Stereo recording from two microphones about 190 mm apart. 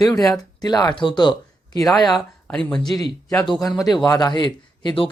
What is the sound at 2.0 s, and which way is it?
Speech, centre (ahead or behind).